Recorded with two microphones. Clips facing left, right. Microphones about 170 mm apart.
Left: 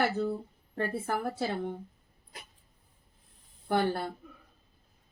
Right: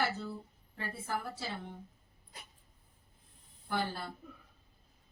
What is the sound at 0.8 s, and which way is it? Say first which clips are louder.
Speech: left 7 dB; 55° left (ahead or behind).